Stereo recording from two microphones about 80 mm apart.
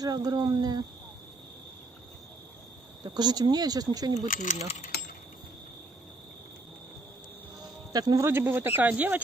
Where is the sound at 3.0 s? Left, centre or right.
Right.